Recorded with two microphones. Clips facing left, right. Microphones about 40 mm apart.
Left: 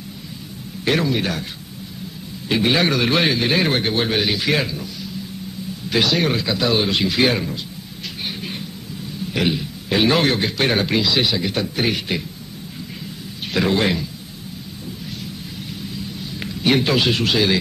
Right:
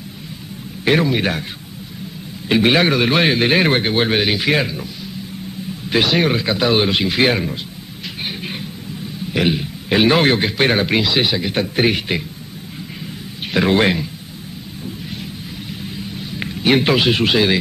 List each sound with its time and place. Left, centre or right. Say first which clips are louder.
0.8 s a man's voice: right 3 dB; right
2.6 s a man's voice: right 3 dB; right
5.9 s a man's voice: right 3 dB; right
8.4 s a sound: right 2 dB; right
9.3 s a man's voice: right 3 dB; centre
11.7 s a man's voice: right 4 dB; right
13.7 s a man's voice: right 4 dB; right
16.3 s speech: right 3 dB; right